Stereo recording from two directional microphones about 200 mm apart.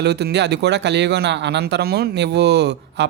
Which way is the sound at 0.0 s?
55° right (ahead or behind).